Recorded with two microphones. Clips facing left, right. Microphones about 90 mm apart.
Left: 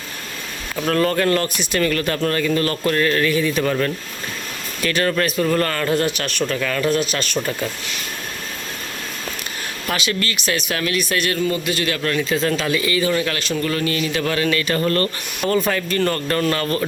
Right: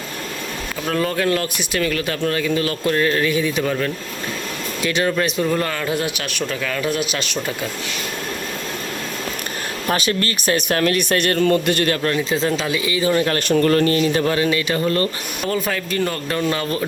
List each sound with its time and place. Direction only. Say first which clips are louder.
0.9 s a man's voice: left 2 dB; 5° right (ahead or behind)
3.6 s speech: left 1 dB; centre (ahead or behind)
4.8 s a man's voice: even; 15° right (ahead or behind)
9.8 s speech: right 3 dB; 35° right (ahead or behind)
11.3 s a man's voice: right 4 dB; 60° right (ahead or behind)
11.9 s speech: right 1 dB; 30° right (ahead or behind)
12.5 s speech: left 1 dB; 15° right (ahead or behind); by 13.4 s 35° right (ahead or behind)
13.5 s speech: right 9 dB; 50° right (ahead or behind); by 15.1 s 15° right (ahead or behind)
15.4 s a man's voice: left 3 dB; 5° right (ahead or behind)